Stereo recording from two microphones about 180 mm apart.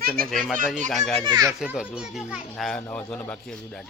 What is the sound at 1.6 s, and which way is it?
A child's voice, 5° right (ahead or behind).